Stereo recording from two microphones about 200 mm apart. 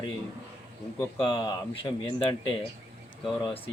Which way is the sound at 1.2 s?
25° left (ahead or behind).